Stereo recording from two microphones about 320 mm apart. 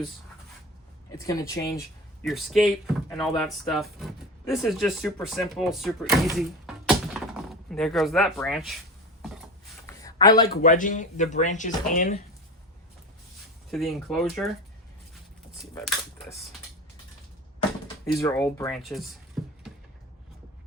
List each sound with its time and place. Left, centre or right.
1.2 s speech: centre
9.8 s a sound: centre
10.5 s speech: left
13.7 s speech: centre
15.6 s speech: centre
18.2 s speech: centre